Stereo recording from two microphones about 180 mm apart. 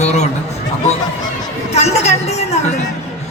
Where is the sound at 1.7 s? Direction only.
35° left (ahead or behind).